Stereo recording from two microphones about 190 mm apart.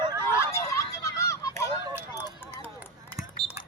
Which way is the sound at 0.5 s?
15° left (ahead or behind).